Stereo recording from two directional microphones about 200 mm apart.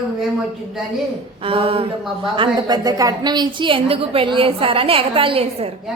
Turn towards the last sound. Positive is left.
turn(degrees=-30)  # may be behind; listen again after turning